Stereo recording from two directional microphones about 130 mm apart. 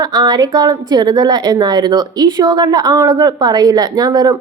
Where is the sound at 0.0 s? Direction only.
30° right (ahead or behind).